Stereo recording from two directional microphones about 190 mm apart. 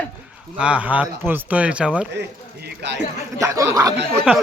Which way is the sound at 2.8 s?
65° right (ahead or behind).